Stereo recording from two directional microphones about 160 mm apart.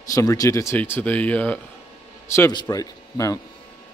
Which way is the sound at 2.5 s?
20° left (ahead or behind).